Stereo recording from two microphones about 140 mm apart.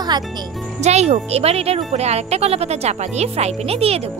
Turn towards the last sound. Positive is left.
turn(degrees=-45)  # may be behind; listen again after turning